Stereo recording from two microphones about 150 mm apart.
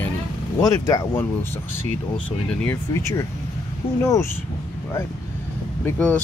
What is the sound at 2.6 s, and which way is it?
Speech, 15° left (ahead or behind).